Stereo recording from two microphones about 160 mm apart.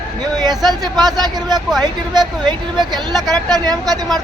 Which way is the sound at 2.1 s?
25° right (ahead or behind).